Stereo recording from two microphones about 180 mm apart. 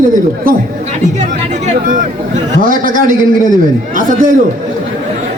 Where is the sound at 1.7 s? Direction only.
50° right (ahead or behind).